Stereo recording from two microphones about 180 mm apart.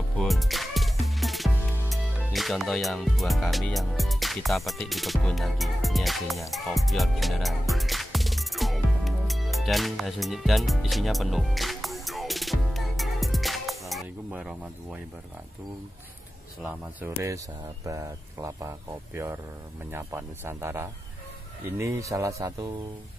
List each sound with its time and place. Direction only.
0.2 s music: centre (ahead or behind)
16.6 s speech: 15° right (ahead or behind)